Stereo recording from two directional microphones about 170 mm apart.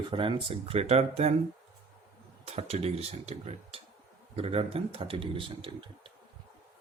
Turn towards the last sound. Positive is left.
turn(degrees=-30)  # may be behind; listen again after turning